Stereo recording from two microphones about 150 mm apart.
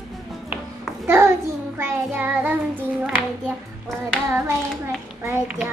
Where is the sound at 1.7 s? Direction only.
15° right (ahead or behind).